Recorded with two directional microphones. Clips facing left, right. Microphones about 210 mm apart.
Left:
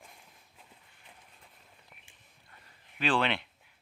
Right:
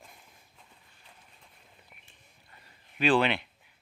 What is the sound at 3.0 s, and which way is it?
Speech, 10° right (ahead or behind).